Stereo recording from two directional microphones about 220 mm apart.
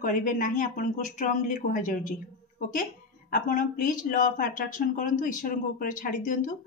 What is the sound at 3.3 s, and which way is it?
Speech, 40° left (ahead or behind).